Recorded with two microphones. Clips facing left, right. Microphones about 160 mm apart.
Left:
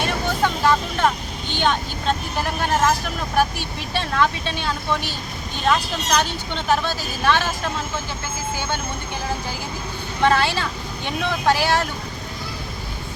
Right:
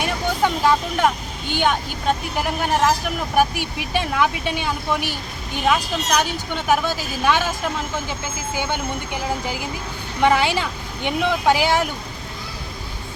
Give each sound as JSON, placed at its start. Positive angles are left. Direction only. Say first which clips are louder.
{"t": 0.0, "sound": "speech", "louder": "right 1 dB", "side_deg": -15}
{"t": 8.5, "sound": "speech", "louder": "right 6 dB", "side_deg": -15}